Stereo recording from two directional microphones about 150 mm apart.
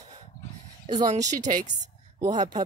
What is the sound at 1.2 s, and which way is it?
Speech, 55° right (ahead or behind).